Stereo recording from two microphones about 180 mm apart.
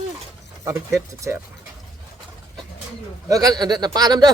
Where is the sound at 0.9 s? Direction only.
15° right (ahead or behind).